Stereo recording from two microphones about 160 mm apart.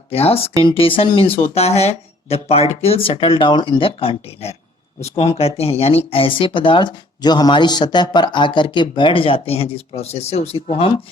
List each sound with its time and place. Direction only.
0.1 s speech: 40° left (ahead or behind)